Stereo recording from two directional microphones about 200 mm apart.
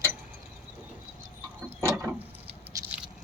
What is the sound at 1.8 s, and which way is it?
Mechanisms, 15° right (ahead or behind).